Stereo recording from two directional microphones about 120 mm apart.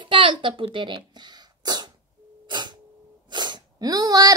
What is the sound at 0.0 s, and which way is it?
Sneeze, 45° right (ahead or behind).